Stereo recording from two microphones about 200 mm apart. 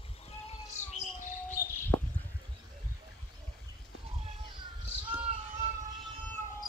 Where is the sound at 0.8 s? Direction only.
35° left (ahead or behind).